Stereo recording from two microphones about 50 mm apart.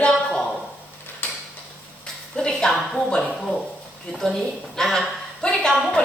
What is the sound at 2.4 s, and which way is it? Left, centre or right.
Speech, centre.